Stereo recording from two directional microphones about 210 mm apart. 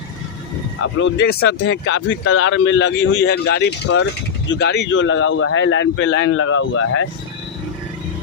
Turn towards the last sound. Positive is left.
turn(degrees=80)